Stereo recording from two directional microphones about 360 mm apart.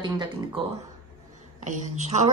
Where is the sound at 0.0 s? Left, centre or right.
Centre.